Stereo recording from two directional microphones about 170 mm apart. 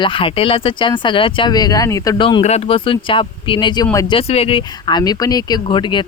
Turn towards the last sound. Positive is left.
turn(degrees=25)  # may be behind; listen again after turning